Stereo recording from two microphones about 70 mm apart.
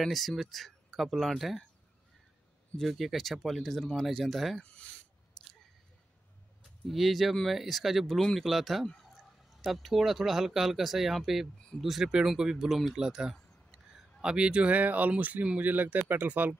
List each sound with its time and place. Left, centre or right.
0.0 s speech: centre
2.8 s speech: centre
4.6 s speech: centre
6.9 s speech: centre; by 16.5 s right